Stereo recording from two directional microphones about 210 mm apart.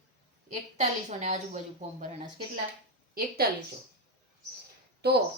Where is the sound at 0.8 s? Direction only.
35° right (ahead or behind).